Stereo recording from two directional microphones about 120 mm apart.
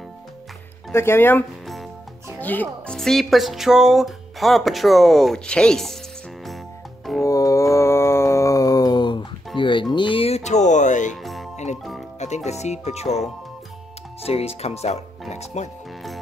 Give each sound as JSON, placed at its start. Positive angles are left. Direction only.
{"t": 0.9, "sound": "speech", "side_deg": 20}
{"t": 2.4, "sound": "speech", "side_deg": 15}
{"t": 3.0, "sound": "speech", "side_deg": 5}
{"t": 7.2, "sound": "a sound", "side_deg": 30}
{"t": 9.6, "sound": "music", "side_deg": 45}
{"t": 11.5, "sound": "music", "side_deg": 75}
{"t": 12.4, "sound": "speech", "side_deg": 70}
{"t": 14.2, "sound": "speech", "side_deg": 55}